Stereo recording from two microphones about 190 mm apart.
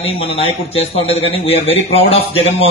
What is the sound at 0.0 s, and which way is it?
Speech, 30° left (ahead or behind).